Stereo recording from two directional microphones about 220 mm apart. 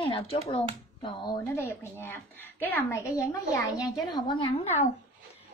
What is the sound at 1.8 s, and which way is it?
A woman's voice, 10° left (ahead or behind).